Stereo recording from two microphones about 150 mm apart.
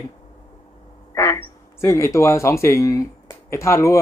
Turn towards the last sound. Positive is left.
turn(degrees=20)  # may be behind; listen again after turning